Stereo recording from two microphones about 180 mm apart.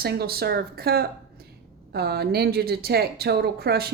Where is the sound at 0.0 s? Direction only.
60° right (ahead or behind).